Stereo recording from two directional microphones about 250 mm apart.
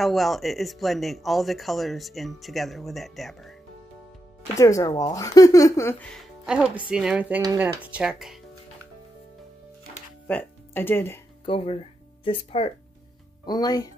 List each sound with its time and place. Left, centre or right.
0.0 s speech: centre
4.6 s speech: centre
10.2 s speech: centre
11.4 s speech: left